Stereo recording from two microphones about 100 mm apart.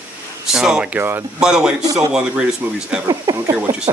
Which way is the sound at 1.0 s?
20° right (ahead or behind).